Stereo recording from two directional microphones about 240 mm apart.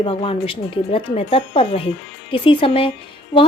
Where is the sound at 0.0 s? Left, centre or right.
Left.